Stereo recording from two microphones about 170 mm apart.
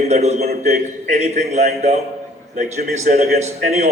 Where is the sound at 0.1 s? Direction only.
40° right (ahead or behind).